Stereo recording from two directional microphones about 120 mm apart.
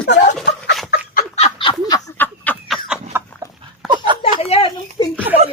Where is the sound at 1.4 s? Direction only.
45° left (ahead or behind).